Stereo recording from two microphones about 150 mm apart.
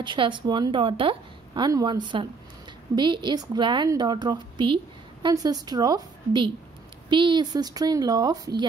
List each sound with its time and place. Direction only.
0.0 s a woman's voice: 30° right (ahead or behind)